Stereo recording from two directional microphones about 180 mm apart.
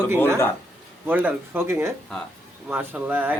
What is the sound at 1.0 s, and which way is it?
Speech, 10° right (ahead or behind).